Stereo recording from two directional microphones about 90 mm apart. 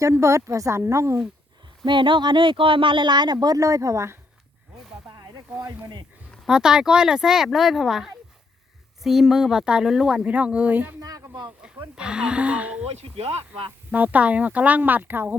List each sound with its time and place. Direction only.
0.0 s a woman's voice: 30° right (ahead or behind)
1.8 s speech: 60° right (ahead or behind); by 4.2 s 35° right (ahead or behind)
5.0 s snake: 50° right (ahead or behind)
6.4 s speech: 5° right (ahead or behind)
11.0 s speech: 45° right (ahead or behind)
11.9 s speech: 10° right (ahead or behind)
13.9 s speech: 15° right (ahead or behind)